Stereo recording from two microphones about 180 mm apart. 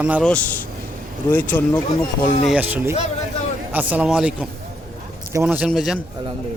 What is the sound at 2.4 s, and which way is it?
Speech, 10° right (ahead or behind).